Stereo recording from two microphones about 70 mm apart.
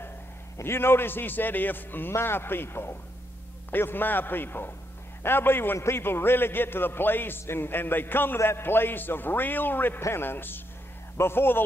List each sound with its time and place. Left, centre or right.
0.6 s a man's voice: left